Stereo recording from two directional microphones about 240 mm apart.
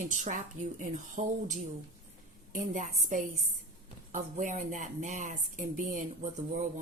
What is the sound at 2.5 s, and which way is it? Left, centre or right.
Speech, right.